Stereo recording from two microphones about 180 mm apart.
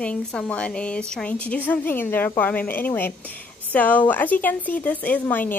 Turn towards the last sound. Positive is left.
turn(degrees=10)  # may be behind; listen again after turning